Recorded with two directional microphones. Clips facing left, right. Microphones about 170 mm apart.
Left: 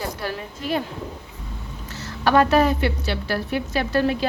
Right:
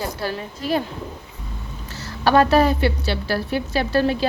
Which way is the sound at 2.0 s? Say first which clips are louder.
Right 1 dB; 35° right (ahead or behind).